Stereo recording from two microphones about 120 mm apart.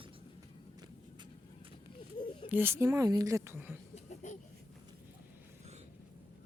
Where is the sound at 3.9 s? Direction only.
75° left (ahead or behind).